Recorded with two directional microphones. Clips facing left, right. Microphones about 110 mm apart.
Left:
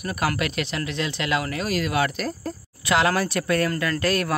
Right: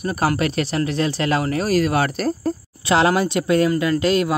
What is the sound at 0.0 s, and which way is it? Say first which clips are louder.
Speech: right 5 dB; 30° right (ahead or behind).